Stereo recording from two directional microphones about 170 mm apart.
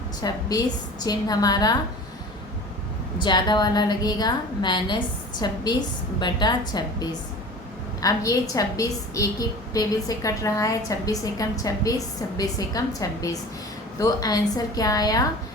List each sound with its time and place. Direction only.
0.2 s a woman's voice: 25° left (ahead or behind)
3.2 s a woman's voice: 25° left (ahead or behind)